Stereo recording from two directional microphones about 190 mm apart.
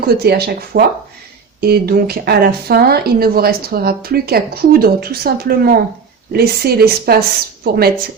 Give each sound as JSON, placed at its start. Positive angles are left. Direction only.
{"t": 0.0, "sound": "speech", "side_deg": -55}